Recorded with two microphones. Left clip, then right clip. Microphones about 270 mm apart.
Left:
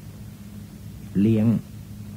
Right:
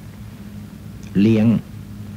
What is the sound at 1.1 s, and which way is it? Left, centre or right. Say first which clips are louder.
Speech: right 5 dB; centre.